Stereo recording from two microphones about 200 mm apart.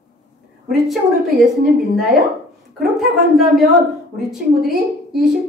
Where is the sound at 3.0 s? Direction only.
Centre (ahead or behind).